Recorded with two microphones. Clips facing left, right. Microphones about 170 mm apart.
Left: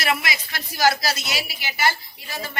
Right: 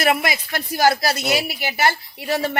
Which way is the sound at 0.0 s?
50° right (ahead or behind).